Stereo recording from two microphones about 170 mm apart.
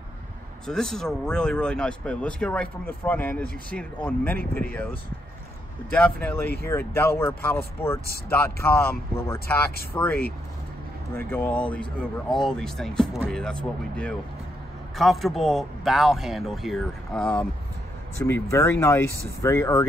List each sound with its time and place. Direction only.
0.7 s speech: 5° left (ahead or behind)
18.2 s speech: 15° left (ahead or behind)